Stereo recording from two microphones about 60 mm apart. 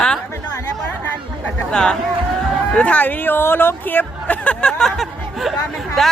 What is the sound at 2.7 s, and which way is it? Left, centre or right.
Speech, left.